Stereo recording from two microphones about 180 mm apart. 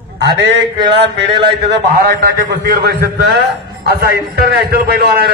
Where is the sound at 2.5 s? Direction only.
65° right (ahead or behind).